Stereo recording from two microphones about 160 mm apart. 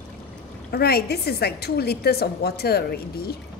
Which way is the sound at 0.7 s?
80° left.